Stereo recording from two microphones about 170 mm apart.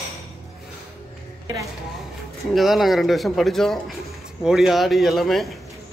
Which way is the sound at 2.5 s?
Centre (ahead or behind).